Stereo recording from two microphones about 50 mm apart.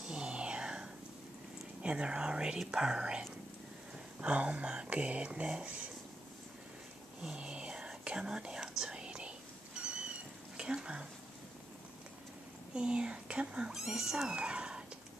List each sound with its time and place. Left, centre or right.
0.0 s whispering: centre
1.8 s speech: centre
4.2 s speech: right
7.3 s whispering: centre
9.8 s cat: centre
10.6 s speech: centre
12.7 s speech: centre
13.7 s speech: centre